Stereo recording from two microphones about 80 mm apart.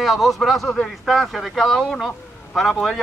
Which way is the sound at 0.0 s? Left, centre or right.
Centre.